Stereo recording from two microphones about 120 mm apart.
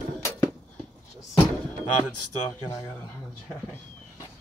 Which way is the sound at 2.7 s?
25° left (ahead or behind).